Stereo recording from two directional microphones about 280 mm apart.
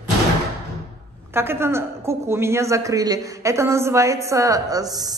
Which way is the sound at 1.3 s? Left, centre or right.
Centre.